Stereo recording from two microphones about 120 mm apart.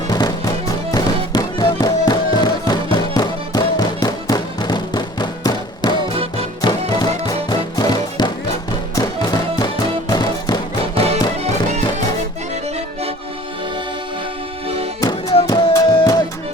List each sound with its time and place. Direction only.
0.1 s music: 35° left (ahead or behind)
10.9 s music: 60° right (ahead or behind)
15.4 s music: 30° left (ahead or behind)